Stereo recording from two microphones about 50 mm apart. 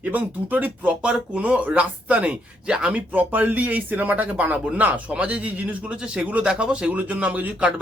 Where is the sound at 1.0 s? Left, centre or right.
Right.